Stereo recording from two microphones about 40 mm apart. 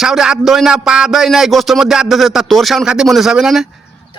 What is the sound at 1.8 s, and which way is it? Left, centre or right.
A man's voice, centre.